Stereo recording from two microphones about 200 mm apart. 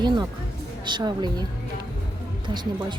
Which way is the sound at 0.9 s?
20° right (ahead or behind).